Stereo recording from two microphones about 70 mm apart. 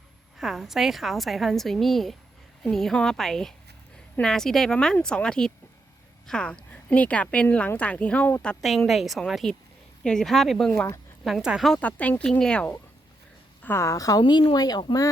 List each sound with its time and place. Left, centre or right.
0.3 s a woman's voice: centre
8.9 s a woman's voice: centre
11.8 s speech: left
13.7 s a woman's voice: left
14.2 s speech: left